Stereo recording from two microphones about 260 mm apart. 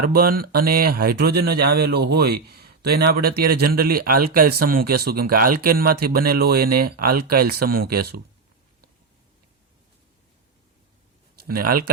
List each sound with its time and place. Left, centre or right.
0.0 s speech: right
11.3 s speech: right